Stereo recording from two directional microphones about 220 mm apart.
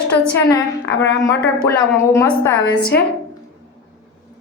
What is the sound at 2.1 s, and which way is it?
Speech, 10° left (ahead or behind).